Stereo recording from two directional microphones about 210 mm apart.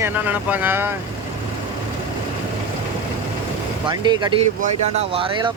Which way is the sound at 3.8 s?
20° right (ahead or behind).